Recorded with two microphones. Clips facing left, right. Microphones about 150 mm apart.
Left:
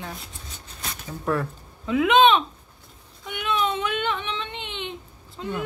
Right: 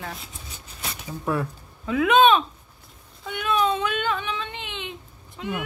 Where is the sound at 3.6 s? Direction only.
20° left (ahead or behind).